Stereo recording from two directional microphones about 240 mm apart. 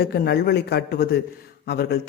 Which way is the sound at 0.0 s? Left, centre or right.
Left.